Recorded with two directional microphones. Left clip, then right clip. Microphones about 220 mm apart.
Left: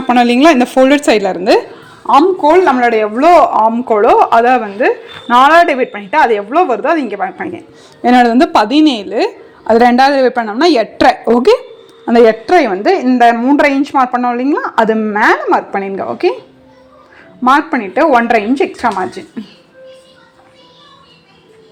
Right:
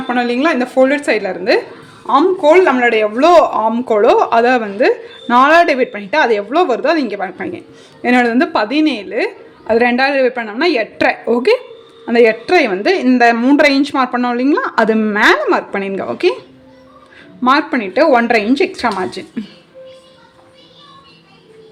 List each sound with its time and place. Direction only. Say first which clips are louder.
0.1 s a woman's voice: left 7 dB; 30° left (ahead or behind)
2.0 s speech: left 2 dB; 5° left (ahead or behind)
8.0 s a woman's voice: left 4 dB; 15° left (ahead or behind); by 16.1 s centre (ahead or behind)
17.4 s speech: left 3 dB; centre (ahead or behind)